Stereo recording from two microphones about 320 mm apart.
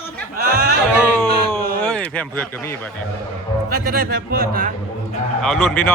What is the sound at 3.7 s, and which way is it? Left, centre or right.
A man's voice, right.